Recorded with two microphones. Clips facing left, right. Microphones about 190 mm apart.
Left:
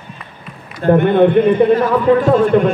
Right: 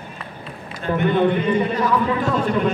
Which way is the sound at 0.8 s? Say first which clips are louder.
Left 8 dB; 55° left (ahead or behind).